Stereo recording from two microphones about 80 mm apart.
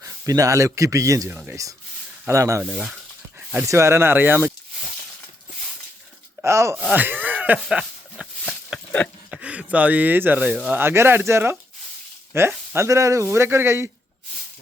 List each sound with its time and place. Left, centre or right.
0.0 s speech: right
3.7 s speech: right
6.4 s speech: right
6.9 s speech: right
7.7 s a sound: centre
9.3 s speech: centre
10.8 s speech: right